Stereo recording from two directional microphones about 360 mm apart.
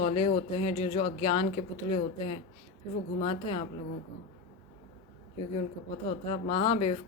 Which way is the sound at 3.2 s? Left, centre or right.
Centre.